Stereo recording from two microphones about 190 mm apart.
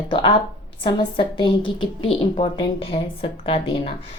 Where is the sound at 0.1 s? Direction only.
25° left (ahead or behind).